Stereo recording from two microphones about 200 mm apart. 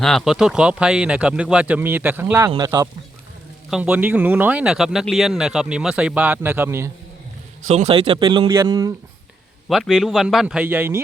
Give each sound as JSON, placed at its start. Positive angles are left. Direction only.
{"t": 0.0, "sound": "speech", "side_deg": 0}
{"t": 3.7, "sound": "speech", "side_deg": -5}
{"t": 7.7, "sound": "speech", "side_deg": -30}
{"t": 9.6, "sound": "speech", "side_deg": 0}